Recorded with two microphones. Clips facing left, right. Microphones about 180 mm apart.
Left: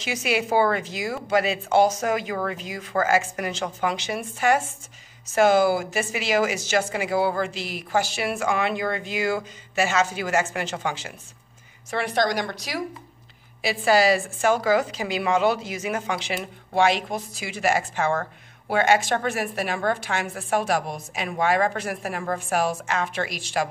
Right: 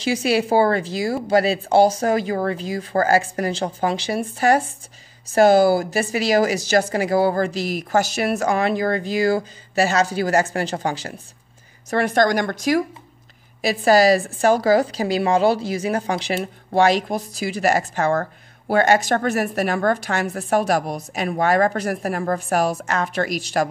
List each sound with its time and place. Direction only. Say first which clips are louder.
0.0 s speech: right 6 dB; 35° right (ahead or behind)